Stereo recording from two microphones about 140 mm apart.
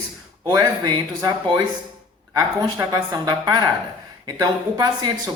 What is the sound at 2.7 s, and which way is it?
A man's voice, 30° right (ahead or behind).